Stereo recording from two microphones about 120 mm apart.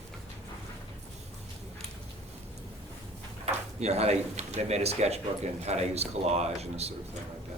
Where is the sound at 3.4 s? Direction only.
60° right (ahead or behind).